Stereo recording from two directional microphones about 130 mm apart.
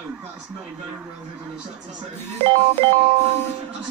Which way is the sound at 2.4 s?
45° right (ahead or behind).